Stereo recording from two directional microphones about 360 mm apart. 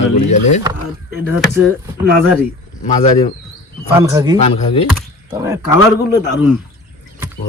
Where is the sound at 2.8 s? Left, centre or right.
Centre.